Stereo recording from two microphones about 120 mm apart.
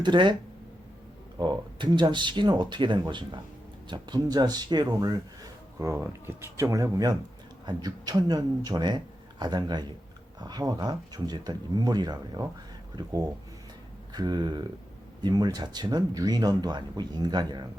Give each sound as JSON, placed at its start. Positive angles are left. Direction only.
{"t": 0.0, "sound": "speech", "side_deg": -40}
{"t": 1.4, "sound": "speech", "side_deg": -40}